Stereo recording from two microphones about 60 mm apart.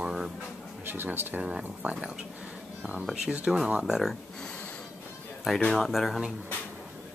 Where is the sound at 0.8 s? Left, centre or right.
Right.